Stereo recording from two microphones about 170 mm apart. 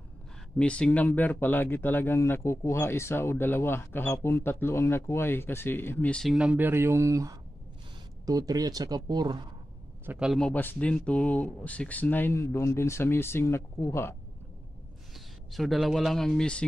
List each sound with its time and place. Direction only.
0.6 s speech: 5° left (ahead or behind)
6.3 s speech: 5° right (ahead or behind); by 9.5 s 25° right (ahead or behind)
10.0 s speech: 5° right (ahead or behind); by 14.1 s 15° left (ahead or behind)
15.1 s speech: centre (ahead or behind)